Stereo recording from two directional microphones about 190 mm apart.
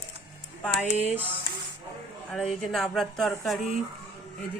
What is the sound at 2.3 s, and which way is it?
Speech, centre (ahead or behind).